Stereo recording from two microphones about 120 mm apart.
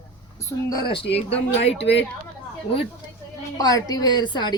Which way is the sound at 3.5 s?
30° left (ahead or behind).